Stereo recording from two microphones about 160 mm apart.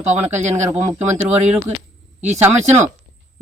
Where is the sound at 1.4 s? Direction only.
40° right (ahead or behind).